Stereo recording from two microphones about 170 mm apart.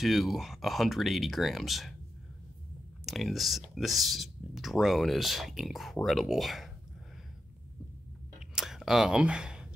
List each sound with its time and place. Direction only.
0.0 s speech: centre (ahead or behind)
3.1 s speech: centre (ahead or behind)
8.4 s chewing: centre (ahead or behind)